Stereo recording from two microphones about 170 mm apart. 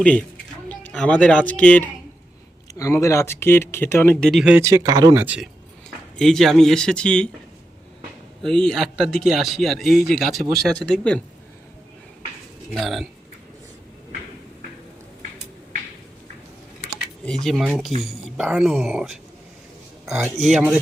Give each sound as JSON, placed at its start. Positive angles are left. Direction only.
{"t": 0.7, "sound": "speech", "side_deg": 10}
{"t": 2.7, "sound": "speech", "side_deg": 20}
{"t": 4.6, "sound": "speech", "side_deg": -20}
{"t": 5.2, "sound": "speech", "side_deg": -10}
{"t": 6.1, "sound": "speech", "side_deg": 0}
{"t": 8.4, "sound": "speech", "side_deg": 5}
{"t": 12.7, "sound": "speech", "side_deg": 0}
{"t": 17.2, "sound": "speech", "side_deg": 0}